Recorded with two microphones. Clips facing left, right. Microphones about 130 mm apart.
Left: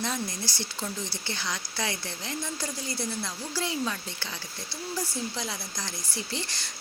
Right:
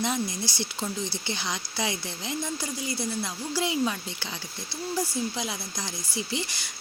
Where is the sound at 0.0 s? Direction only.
15° right (ahead or behind).